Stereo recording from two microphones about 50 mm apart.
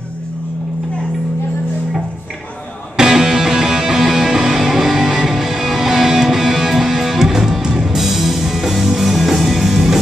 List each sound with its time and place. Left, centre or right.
3.0 s music: centre